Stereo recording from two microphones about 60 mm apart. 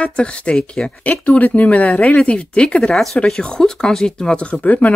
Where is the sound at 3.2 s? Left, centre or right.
Centre.